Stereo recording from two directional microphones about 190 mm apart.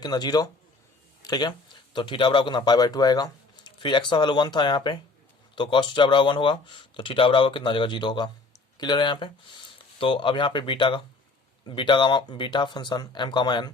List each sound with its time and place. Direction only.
0.0 s speech: 20° left (ahead or behind)